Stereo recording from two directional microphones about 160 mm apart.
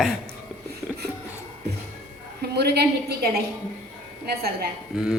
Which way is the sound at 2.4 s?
80° right.